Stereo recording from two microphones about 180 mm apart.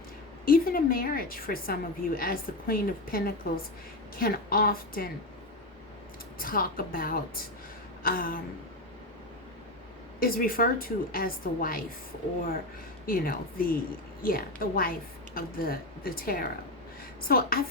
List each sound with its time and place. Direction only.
0.4 s a woman's voice: 55° left (ahead or behind)
6.4 s a woman's voice: 55° left (ahead or behind)
10.2 s a woman's voice: 55° left (ahead or behind)
13.1 s a woman's voice: 55° left (ahead or behind)